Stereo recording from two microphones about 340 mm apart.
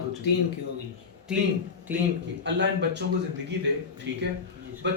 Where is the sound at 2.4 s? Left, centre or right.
Right.